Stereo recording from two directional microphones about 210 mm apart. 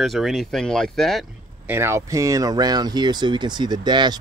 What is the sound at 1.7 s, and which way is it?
Speech, 10° right (ahead or behind).